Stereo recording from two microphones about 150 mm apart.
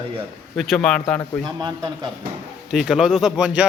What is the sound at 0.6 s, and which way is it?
Speech, 5° left (ahead or behind).